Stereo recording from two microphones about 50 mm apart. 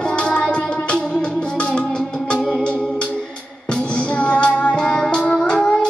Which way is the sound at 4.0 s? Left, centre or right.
Left.